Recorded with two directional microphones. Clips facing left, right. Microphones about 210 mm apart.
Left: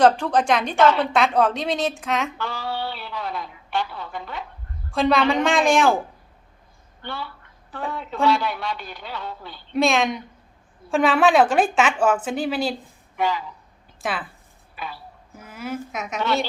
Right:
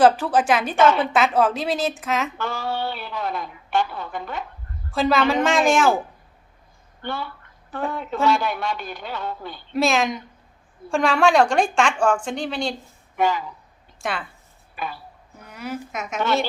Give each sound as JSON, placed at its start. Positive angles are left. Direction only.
{"t": 0.0, "sound": "speech", "side_deg": -5}
{"t": 2.4, "sound": "a sound", "side_deg": -45}
{"t": 4.9, "sound": "speech", "side_deg": 0}
{"t": 7.0, "sound": "a woman's voice", "side_deg": -50}
{"t": 9.7, "sound": "speech", "side_deg": 0}
{"t": 13.1, "sound": "speech", "side_deg": -50}
{"t": 14.0, "sound": "speech", "side_deg": 0}
{"t": 14.8, "sound": "a woman's voice", "side_deg": -50}
{"t": 15.4, "sound": "speech", "side_deg": 0}